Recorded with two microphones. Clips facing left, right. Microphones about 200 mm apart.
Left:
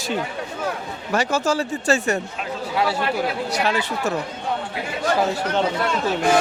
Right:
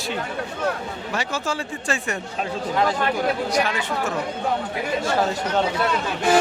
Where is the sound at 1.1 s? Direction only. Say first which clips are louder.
Left 7 dB; 45° left (ahead or behind).